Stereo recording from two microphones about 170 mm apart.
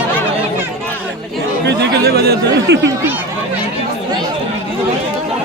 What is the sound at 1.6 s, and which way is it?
Speech, 80° right.